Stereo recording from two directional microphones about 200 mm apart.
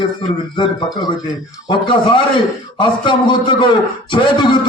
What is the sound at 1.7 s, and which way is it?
Speech, 25° left (ahead or behind).